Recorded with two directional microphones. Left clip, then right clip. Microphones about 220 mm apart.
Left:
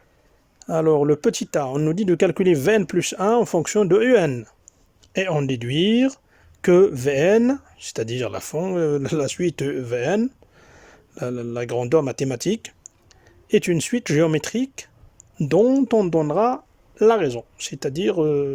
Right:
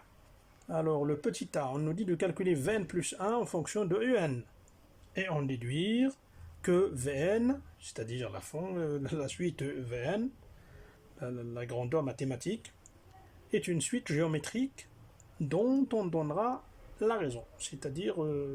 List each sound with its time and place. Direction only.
0.7 s speech: 45° left (ahead or behind)